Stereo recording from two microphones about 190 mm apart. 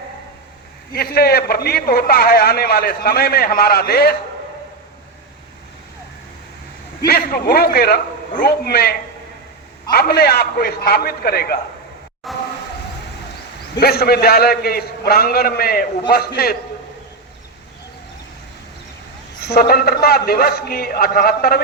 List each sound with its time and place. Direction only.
0.9 s a man's voice: 55° left (ahead or behind)
7.0 s a man's voice: 50° left (ahead or behind)
12.3 s train: centre (ahead or behind)
13.7 s a man's voice: 55° left (ahead or behind)
19.5 s a man's voice: 55° left (ahead or behind)